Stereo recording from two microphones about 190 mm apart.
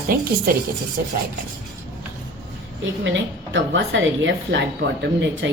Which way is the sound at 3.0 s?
80° right.